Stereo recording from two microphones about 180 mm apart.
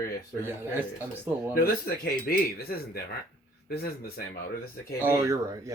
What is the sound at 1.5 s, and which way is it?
Speech, 55° left (ahead or behind).